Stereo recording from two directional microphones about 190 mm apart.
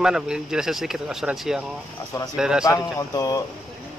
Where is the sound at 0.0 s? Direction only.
5° right (ahead or behind).